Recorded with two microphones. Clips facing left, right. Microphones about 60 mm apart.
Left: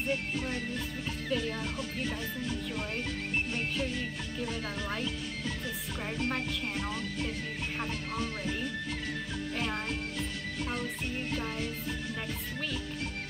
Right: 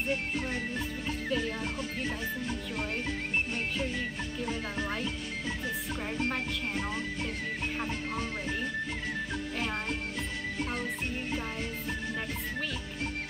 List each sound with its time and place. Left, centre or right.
0.1 s speech: centre
1.3 s music: centre
3.5 s music: centre
4.5 s speech: centre
6.1 s speech: centre